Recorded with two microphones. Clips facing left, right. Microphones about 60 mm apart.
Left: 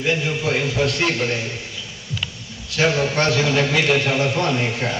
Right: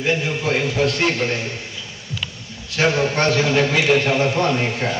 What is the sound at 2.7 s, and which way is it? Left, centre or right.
A man's voice, right.